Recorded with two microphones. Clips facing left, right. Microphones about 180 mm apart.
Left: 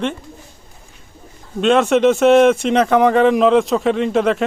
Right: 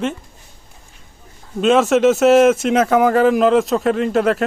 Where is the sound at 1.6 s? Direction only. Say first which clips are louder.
Even; centre (ahead or behind).